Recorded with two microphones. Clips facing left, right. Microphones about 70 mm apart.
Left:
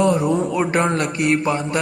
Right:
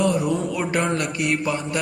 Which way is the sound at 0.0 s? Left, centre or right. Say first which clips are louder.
Left 4 dB; left.